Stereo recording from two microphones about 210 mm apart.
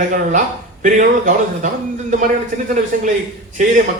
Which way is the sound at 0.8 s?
35° right (ahead or behind).